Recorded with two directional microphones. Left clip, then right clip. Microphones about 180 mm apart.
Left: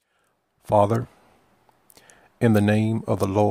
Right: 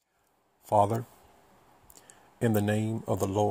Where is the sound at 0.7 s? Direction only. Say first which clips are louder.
Left 6 dB; 45° left (ahead or behind).